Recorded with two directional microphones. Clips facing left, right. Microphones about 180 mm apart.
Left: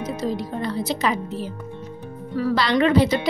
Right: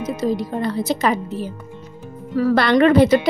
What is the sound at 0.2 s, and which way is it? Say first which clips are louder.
A woman's voice: right 6 dB; 45° right (ahead or behind).